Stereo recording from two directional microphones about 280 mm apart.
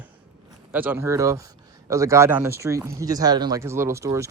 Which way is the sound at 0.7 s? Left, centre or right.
Centre.